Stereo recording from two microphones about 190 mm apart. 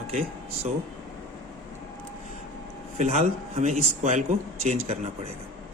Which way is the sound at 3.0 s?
40° right (ahead or behind).